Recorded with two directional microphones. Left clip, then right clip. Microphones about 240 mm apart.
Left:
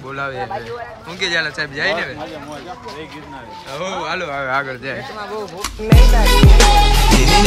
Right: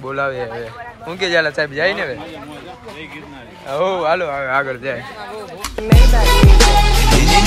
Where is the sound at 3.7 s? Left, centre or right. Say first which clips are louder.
Right 7 dB; centre.